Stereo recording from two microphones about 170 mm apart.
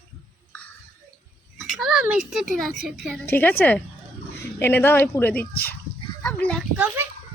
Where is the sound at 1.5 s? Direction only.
Centre (ahead or behind).